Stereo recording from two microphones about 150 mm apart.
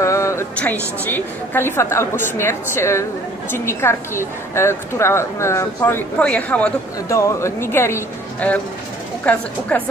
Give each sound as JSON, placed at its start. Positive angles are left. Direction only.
{"t": 0.0, "sound": "a sound", "side_deg": 20}
{"t": 0.6, "sound": "a woman's voice", "side_deg": 10}
{"t": 7.1, "sound": "a woman's voice", "side_deg": 20}